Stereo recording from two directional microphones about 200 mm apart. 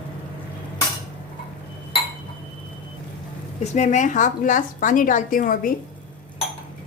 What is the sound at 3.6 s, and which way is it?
A woman's voice, 35° left (ahead or behind).